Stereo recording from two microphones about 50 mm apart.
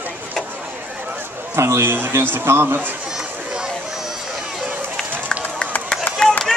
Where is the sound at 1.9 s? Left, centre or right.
Right.